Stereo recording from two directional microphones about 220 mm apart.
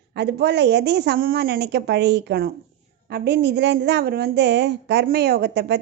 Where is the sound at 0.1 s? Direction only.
50° right (ahead or behind).